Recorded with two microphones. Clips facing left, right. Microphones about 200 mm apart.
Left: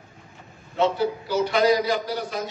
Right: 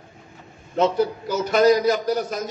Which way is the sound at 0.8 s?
45° right (ahead or behind).